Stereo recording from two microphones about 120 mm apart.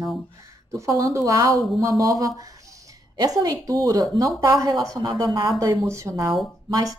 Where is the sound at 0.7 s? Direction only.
25° right (ahead or behind).